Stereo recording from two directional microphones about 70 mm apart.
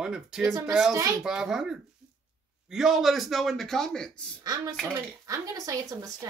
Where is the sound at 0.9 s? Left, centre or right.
Right.